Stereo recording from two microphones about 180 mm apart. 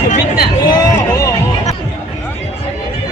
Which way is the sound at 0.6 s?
20° left (ahead or behind).